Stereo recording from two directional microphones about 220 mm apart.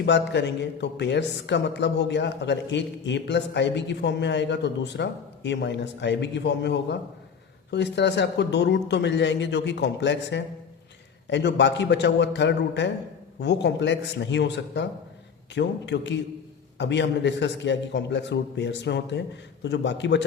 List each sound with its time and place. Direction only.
0.0 s speech: 50° left (ahead or behind)